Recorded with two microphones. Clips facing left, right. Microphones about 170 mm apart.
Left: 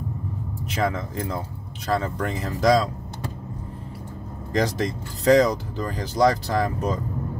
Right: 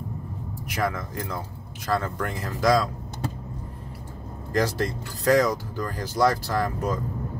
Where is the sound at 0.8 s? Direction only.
25° left (ahead or behind).